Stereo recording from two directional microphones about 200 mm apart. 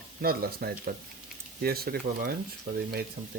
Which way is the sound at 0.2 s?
50° right (ahead or behind).